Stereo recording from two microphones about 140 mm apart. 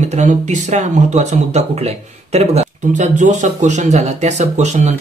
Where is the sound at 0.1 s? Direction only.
60° right (ahead or behind).